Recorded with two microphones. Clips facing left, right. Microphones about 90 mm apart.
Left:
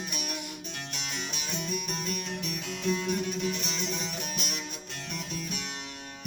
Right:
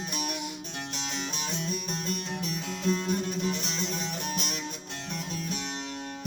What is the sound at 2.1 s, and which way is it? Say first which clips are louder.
Music: right 4 dB; 35° right (ahead or behind).